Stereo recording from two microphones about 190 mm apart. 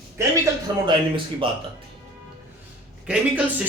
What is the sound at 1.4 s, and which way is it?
Speech, 30° right (ahead or behind).